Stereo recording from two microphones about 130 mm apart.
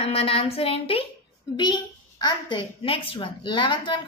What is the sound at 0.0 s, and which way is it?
Speech, 50° left (ahead or behind).